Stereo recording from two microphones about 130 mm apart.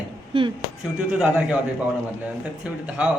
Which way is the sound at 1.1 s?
10° right (ahead or behind).